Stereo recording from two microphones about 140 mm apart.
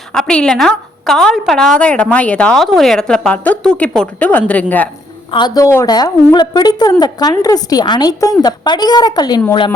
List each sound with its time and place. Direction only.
0.1 s a woman's voice: 5° left (ahead or behind)
5.3 s a woman's voice: 30° left (ahead or behind)